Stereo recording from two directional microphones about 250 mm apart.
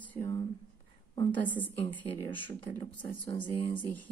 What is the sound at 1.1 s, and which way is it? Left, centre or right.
Speech, centre.